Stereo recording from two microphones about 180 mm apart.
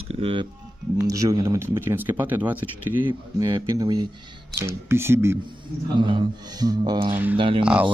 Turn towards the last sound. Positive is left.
turn(degrees=-5)  # may be behind; listen again after turning